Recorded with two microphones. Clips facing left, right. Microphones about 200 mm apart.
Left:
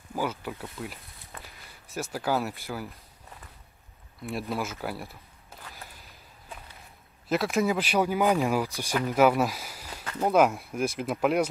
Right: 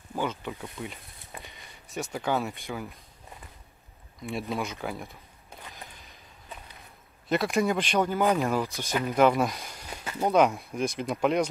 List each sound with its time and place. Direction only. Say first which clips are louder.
0.1 s speech: even; 5° left (ahead or behind)
1.4 s a sound: right 1 dB; centre (ahead or behind)
2.1 s speech: left 1 dB; 5° left (ahead or behind)
4.2 s speech: even; centre (ahead or behind)
5.6 s a sound: right 1 dB; 15° right (ahead or behind)
7.2 s speech: even; centre (ahead or behind)